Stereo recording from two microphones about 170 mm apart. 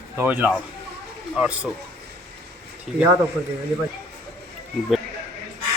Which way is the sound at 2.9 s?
Centre (ahead or behind).